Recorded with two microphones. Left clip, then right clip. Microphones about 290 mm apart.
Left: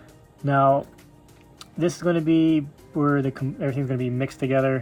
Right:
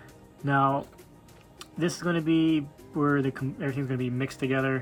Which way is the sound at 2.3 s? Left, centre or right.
Right.